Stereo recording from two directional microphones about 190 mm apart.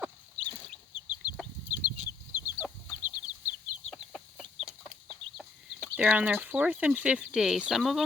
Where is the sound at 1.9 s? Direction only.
5° right (ahead or behind).